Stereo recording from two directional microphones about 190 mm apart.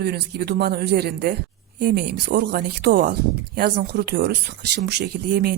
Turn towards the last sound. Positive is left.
turn(degrees=-55)  # may be behind; listen again after turning